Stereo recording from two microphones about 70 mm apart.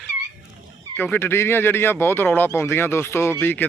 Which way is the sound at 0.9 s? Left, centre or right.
Left.